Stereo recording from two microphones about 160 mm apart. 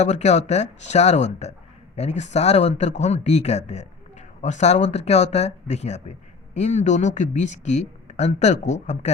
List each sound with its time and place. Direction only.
0.0 s speech: 45° left (ahead or behind)